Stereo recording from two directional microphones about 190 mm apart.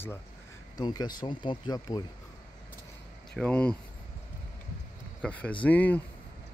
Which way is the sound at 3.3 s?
5° left (ahead or behind).